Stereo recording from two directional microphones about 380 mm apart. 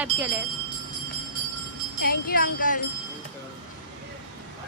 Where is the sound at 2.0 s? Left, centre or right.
Left.